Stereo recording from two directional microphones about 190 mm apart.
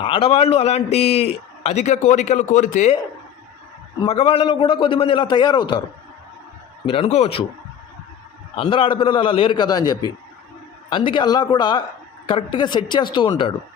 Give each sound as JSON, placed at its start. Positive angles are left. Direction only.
{"t": 0.0, "sound": "a man's voice", "side_deg": 30}
{"t": 4.0, "sound": "a man's voice", "side_deg": 30}
{"t": 6.8, "sound": "a man's voice", "side_deg": 30}
{"t": 8.5, "sound": "a man's voice", "side_deg": 25}